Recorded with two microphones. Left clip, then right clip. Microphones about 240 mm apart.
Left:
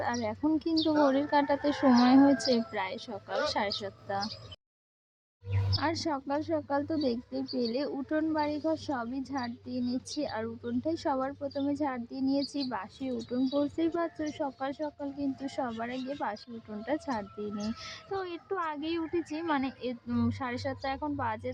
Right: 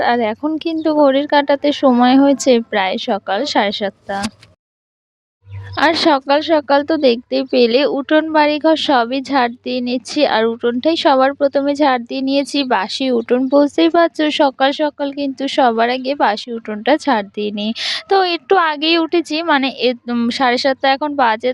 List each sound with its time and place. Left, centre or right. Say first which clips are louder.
0.0 s speech: right 16 dB; right
5.7 s speech: right 19 dB; right